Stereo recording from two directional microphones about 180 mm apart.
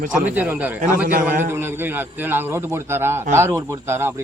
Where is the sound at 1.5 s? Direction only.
15° right (ahead or behind).